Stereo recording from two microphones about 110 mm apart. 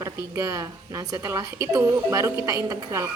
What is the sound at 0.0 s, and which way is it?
A woman's voice, 30° right (ahead or behind).